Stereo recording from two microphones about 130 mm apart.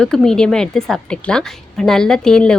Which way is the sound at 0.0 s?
5° left (ahead or behind).